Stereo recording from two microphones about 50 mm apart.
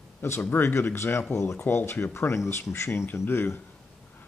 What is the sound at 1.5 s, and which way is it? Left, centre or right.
Speech, left.